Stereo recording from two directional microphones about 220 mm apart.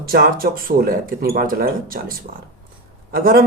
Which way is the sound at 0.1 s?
40° right (ahead or behind).